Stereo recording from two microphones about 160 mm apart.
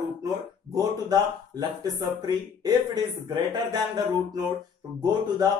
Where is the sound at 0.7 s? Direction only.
25° right (ahead or behind).